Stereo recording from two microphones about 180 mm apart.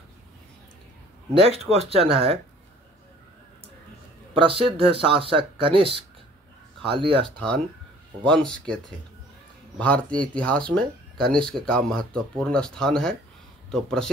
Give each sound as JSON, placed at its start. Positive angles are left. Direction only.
{"t": 1.3, "sound": "speech", "side_deg": -30}
{"t": 4.3, "sound": "speech", "side_deg": -30}
{"t": 7.3, "sound": "speech", "side_deg": 5}
{"t": 9.8, "sound": "speech", "side_deg": 5}